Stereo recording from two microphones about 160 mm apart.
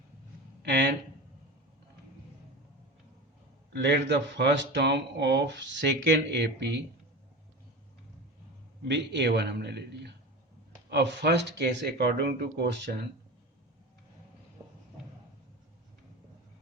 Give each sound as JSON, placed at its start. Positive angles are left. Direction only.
{"t": 3.7, "sound": "speech", "side_deg": -90}
{"t": 8.8, "sound": "speech", "side_deg": -90}